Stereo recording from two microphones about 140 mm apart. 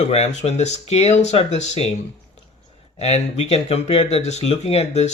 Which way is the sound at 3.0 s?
50° left (ahead or behind).